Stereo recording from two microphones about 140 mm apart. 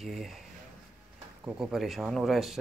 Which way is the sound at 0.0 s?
Centre (ahead or behind).